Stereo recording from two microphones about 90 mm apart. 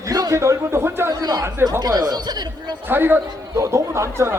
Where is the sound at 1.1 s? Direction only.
45° right (ahead or behind).